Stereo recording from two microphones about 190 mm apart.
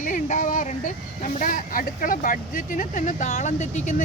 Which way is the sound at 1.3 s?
45° left (ahead or behind).